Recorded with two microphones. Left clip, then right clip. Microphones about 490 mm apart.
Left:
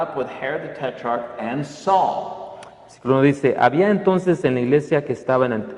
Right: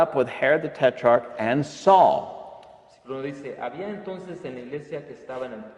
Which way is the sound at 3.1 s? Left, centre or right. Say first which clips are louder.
Left 16 dB; left.